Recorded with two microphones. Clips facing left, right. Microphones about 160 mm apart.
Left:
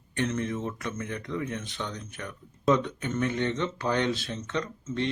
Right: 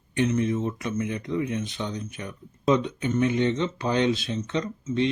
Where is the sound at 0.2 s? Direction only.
15° right (ahead or behind).